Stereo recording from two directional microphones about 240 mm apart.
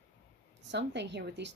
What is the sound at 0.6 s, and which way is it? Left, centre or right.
Speech, right.